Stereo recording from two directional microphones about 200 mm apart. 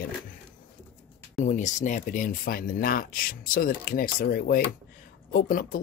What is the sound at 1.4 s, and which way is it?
Speech, 35° left (ahead or behind).